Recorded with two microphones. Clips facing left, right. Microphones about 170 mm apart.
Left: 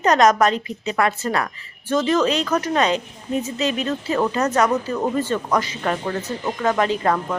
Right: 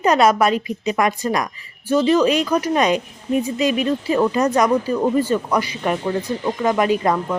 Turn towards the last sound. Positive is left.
turn(degrees=-10)  # may be behind; listen again after turning